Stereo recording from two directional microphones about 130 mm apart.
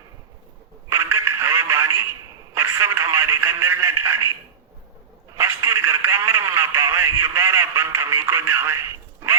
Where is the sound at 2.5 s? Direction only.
20° right (ahead or behind).